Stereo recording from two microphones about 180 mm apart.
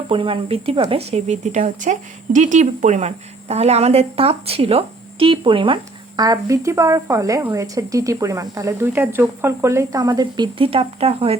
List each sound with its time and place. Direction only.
0.1 s speech: 30° right (ahead or behind)